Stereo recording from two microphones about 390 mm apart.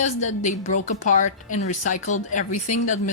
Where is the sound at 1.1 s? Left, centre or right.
Centre.